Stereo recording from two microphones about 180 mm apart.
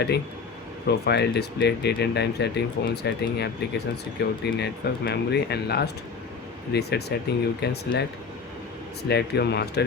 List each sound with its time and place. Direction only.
0.9 s speech: 65° left (ahead or behind)
9.0 s speech: 65° left (ahead or behind)